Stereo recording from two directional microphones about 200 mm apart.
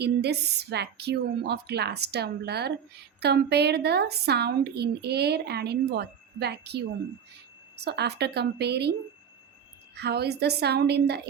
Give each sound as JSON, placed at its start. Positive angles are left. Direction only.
{"t": 0.0, "sound": "a woman's voice", "side_deg": -55}